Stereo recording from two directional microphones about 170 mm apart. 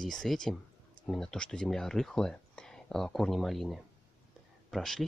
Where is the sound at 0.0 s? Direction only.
Centre (ahead or behind).